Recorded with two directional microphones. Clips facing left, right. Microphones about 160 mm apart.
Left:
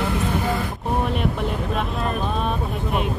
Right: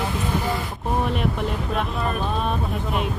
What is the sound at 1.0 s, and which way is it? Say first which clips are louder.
Speech: even; centre (ahead or behind).